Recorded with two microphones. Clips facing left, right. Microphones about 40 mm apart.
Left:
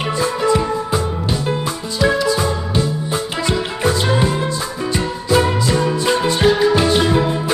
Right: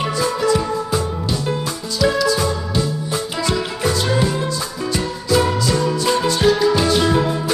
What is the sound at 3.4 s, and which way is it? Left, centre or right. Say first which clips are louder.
Music: left 2 dB; left.